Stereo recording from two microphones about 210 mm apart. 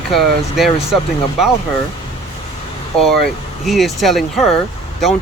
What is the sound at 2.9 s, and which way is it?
Speech, centre (ahead or behind).